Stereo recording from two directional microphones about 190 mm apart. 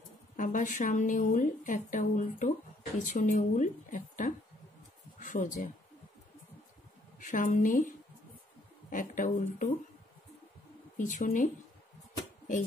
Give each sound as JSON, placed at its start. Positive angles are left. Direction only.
{"t": 0.4, "sound": "a woman's voice", "side_deg": 45}
{"t": 7.2, "sound": "a woman's voice", "side_deg": 45}
{"t": 8.9, "sound": "a woman's voice", "side_deg": 45}
{"t": 11.0, "sound": "a woman's voice", "side_deg": 40}